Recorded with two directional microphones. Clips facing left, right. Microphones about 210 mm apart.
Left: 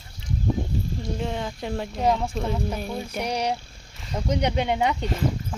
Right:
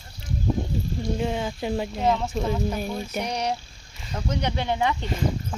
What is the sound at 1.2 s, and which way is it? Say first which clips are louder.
Speech: right 2 dB; 5° right (ahead or behind).